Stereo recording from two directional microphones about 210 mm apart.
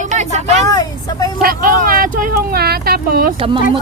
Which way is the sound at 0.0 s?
35° right (ahead or behind).